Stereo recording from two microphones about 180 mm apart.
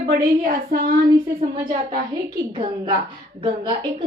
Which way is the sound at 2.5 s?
25° right (ahead or behind).